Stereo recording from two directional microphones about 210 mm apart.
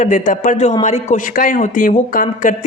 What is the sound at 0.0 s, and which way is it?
Speech, 35° left (ahead or behind).